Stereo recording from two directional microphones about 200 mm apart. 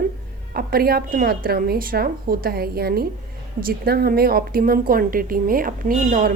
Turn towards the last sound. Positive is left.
turn(degrees=-45)  # may be behind; listen again after turning